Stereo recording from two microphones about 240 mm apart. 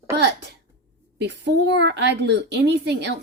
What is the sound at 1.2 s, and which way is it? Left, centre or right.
Speech, right.